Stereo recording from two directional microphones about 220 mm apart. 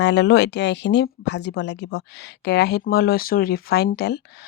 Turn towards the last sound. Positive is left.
turn(degrees=45)  # may be behind; listen again after turning